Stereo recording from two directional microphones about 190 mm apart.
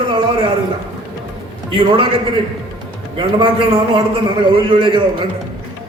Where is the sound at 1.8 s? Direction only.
25° right (ahead or behind).